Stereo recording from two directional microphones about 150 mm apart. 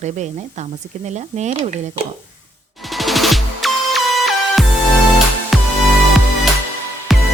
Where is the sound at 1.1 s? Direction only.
50° right (ahead or behind).